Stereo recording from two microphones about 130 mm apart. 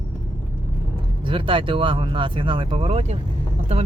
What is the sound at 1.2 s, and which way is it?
Speech, 40° right (ahead or behind).